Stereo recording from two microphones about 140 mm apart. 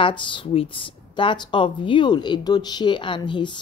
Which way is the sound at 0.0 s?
35° left (ahead or behind).